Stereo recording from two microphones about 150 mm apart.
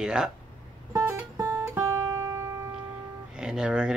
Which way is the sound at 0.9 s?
15° right (ahead or behind).